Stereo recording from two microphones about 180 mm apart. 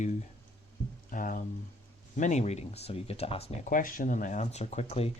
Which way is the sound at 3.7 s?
50° left (ahead or behind).